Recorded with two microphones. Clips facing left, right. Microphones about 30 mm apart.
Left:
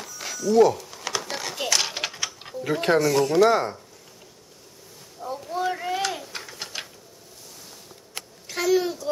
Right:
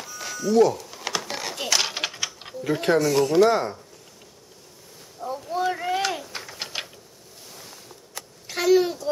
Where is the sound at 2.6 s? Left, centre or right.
Centre.